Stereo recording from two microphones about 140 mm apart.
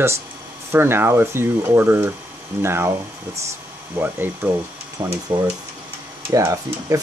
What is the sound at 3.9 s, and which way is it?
Speech, 15° right (ahead or behind).